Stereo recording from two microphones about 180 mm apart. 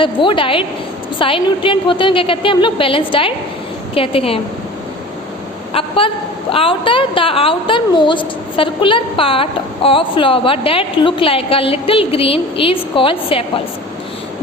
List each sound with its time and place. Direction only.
0.0 s a woman's voice: 30° left (ahead or behind)
5.7 s a woman's voice: 30° left (ahead or behind)